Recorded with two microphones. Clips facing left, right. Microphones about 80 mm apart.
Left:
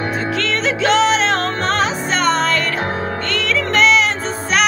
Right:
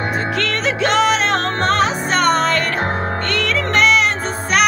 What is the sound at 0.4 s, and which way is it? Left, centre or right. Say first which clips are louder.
Music: left 1 dB; right.